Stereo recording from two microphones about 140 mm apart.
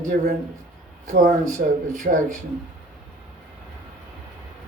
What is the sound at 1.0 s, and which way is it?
Speech, 75° right (ahead or behind).